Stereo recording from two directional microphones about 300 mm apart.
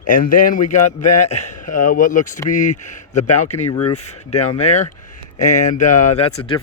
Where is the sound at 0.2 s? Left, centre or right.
Left.